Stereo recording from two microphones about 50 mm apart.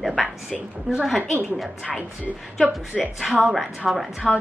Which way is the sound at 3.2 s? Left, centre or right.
Centre.